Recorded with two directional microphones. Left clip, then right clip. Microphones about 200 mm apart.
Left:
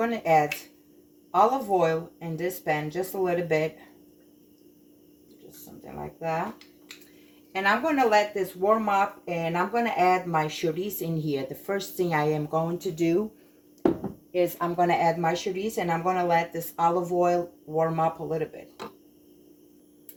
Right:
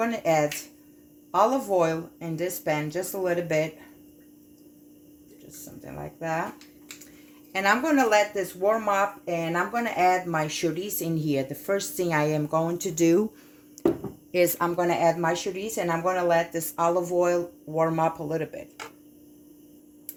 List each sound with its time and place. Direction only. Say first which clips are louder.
1.3 s speech: even; 50° right (ahead or behind)
5.8 s speech: left 1 dB; 50° right (ahead or behind)
7.5 s speech: right 1 dB; 60° right (ahead or behind)
8.6 s speech: even; 50° right (ahead or behind)
14.3 s speech: right 1 dB; 60° right (ahead or behind)